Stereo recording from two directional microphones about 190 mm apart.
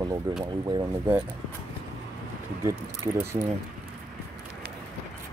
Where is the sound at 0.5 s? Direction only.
25° right (ahead or behind).